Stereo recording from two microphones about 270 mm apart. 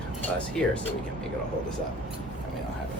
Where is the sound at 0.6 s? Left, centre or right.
Centre.